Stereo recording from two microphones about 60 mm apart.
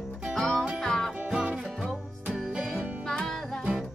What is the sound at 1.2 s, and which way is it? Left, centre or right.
Music, centre.